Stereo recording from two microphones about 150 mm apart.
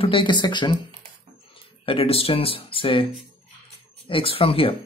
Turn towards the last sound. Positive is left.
turn(degrees=40)  # may be behind; listen again after turning